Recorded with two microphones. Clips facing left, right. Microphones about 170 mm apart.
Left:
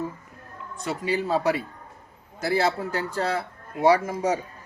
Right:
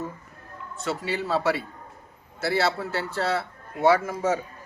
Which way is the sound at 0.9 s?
15° left (ahead or behind).